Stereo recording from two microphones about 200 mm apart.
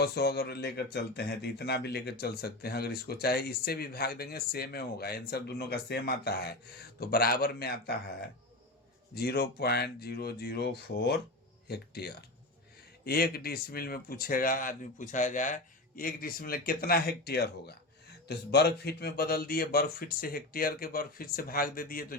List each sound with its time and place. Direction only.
0.0 s speech: 55° left (ahead or behind)
9.1 s speech: 50° left (ahead or behind)